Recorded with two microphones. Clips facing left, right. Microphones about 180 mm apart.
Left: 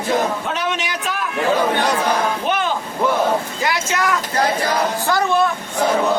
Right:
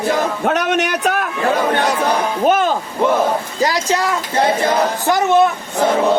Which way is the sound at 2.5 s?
45° right (ahead or behind).